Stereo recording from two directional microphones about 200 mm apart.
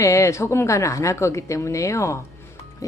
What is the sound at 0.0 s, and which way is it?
A woman's voice, 15° left (ahead or behind).